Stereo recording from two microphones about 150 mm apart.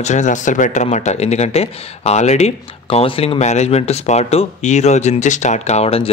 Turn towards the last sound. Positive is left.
turn(degrees=40)  # may be behind; listen again after turning